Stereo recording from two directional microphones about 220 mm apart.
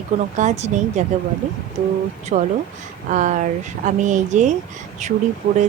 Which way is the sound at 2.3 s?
35° right (ahead or behind).